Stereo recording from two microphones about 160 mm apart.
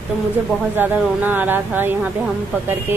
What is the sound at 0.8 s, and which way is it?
A woman's voice, 10° right (ahead or behind).